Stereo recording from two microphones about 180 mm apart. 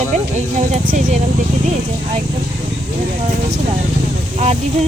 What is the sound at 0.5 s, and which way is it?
Speech, 45° right (ahead or behind).